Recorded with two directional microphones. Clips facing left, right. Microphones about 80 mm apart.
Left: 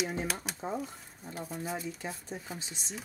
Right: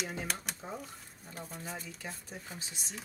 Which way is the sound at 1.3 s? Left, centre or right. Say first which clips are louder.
Left 6 dB; centre.